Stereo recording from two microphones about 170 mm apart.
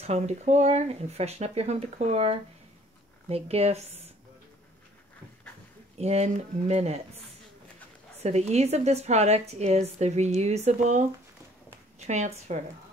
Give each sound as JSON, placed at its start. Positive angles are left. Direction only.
{"t": 0.0, "sound": "a woman's voice", "side_deg": -40}
{"t": 5.9, "sound": "a woman's voice", "side_deg": -40}
{"t": 8.2, "sound": "a woman's voice", "side_deg": -40}
{"t": 12.1, "sound": "speech", "side_deg": -40}